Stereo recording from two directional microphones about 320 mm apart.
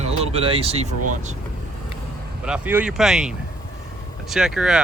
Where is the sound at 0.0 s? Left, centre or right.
Centre.